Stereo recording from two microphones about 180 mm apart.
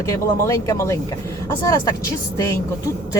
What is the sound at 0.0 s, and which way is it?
Speech, 15° left (ahead or behind).